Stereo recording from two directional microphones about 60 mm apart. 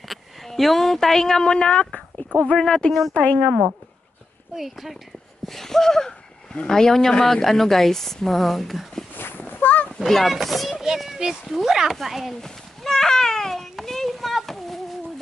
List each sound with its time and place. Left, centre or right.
0.1 s a woman's voice: centre
3.1 s speech: centre
4.6 s speech: centre
9.1 s honk: left
9.9 s speech: centre
11.4 s a sound: centre